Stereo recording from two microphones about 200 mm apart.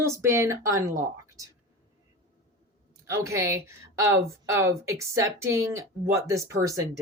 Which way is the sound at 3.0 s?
15° right (ahead or behind).